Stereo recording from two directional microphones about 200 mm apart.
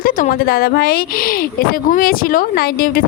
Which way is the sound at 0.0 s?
45° left (ahead or behind).